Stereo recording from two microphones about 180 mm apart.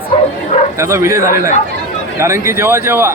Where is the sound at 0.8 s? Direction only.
15° right (ahead or behind).